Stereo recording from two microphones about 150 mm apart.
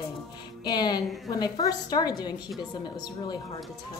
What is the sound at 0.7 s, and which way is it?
Music, 25° left (ahead or behind).